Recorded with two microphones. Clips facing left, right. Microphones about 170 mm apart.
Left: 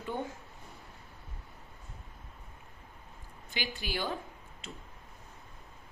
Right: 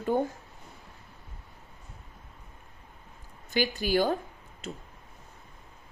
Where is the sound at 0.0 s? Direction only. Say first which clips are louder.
Right 10 dB; 40° right (ahead or behind).